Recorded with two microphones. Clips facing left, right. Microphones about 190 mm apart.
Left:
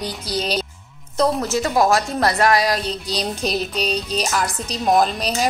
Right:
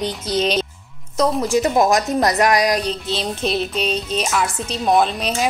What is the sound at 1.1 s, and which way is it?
A woman's voice, 15° right (ahead or behind).